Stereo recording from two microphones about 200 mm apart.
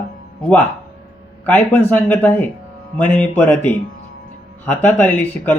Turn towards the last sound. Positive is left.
turn(degrees=10)  # may be behind; listen again after turning